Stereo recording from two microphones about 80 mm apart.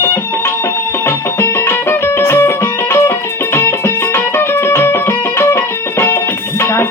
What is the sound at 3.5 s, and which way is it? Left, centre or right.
Music, left.